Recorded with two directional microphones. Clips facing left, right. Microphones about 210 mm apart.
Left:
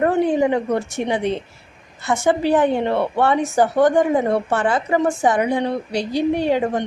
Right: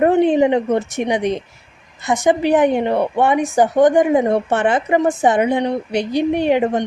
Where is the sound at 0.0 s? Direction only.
20° right (ahead or behind).